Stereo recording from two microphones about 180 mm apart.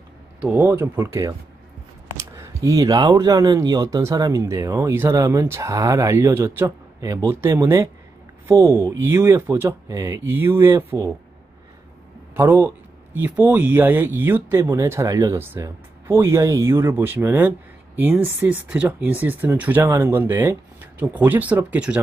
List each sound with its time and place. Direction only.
0.4 s speech: 10° right (ahead or behind)
12.4 s speech: 10° right (ahead or behind)